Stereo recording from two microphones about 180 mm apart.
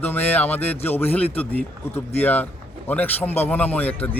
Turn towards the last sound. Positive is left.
turn(degrees=10)  # may be behind; listen again after turning